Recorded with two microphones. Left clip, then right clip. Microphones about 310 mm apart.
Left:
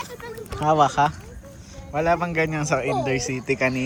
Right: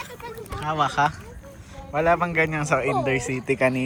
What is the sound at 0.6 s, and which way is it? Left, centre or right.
A man's voice, centre.